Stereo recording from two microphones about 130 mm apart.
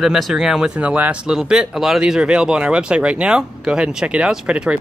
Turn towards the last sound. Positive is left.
turn(degrees=-10)  # may be behind; listen again after turning